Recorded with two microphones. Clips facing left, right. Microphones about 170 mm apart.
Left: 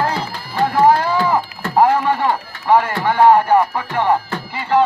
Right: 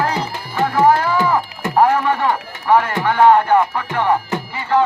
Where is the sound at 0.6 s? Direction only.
15° left (ahead or behind).